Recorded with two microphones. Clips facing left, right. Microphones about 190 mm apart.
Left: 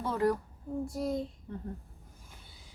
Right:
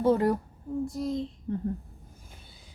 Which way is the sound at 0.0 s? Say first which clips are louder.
Right 6 dB; 25° right (ahead or behind).